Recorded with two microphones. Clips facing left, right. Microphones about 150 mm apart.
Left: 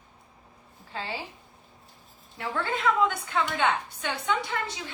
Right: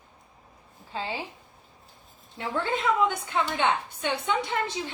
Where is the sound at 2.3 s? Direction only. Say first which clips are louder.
Right 2 dB; 20° right (ahead or behind).